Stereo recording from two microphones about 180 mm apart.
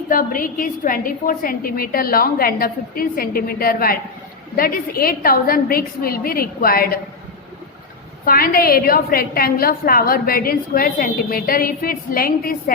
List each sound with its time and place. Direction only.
0.1 s a woman's voice: 50° left (ahead or behind)
8.2 s a woman's voice: 55° left (ahead or behind)